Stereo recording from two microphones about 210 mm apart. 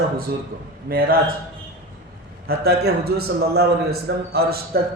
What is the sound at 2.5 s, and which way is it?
A man's voice, 50° right (ahead or behind).